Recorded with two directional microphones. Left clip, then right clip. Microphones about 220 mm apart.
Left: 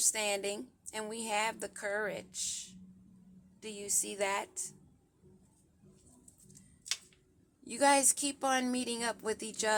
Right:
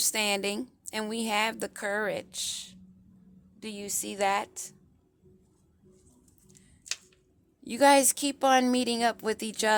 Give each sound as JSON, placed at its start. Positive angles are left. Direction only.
{"t": 0.0, "sound": "a woman's voice", "side_deg": -40}
{"t": 7.6, "sound": "a woman's voice", "side_deg": -30}